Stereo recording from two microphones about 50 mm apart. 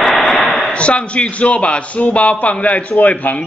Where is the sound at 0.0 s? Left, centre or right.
Centre.